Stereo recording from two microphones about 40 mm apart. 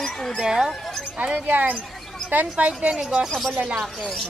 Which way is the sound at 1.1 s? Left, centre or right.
Right.